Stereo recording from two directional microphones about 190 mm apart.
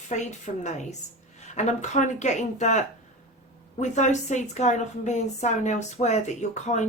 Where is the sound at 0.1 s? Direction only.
40° left (ahead or behind).